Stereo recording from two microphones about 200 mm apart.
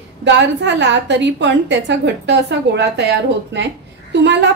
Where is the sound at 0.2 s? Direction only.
60° right (ahead or behind).